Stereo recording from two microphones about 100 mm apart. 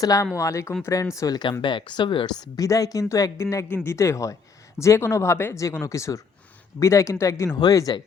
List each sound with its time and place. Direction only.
0.0 s speech: 35° left (ahead or behind)
1.6 s speech: 50° left (ahead or behind)
2.6 s speech: 35° left (ahead or behind)